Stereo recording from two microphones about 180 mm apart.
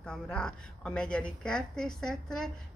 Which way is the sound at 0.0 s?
5° left (ahead or behind).